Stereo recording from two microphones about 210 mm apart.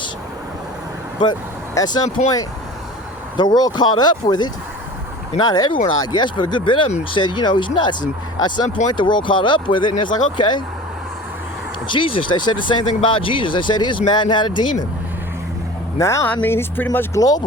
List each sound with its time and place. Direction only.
1.2 s speech: 20° left (ahead or behind)
3.3 s speech: 20° left (ahead or behind)
11.9 s speech: 25° left (ahead or behind)
16.0 s speech: 15° left (ahead or behind)